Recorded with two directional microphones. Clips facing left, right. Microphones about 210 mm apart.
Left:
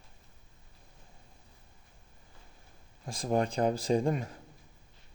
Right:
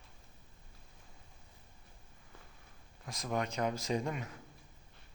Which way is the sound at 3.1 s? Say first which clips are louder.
Left 7 dB; 30° left (ahead or behind).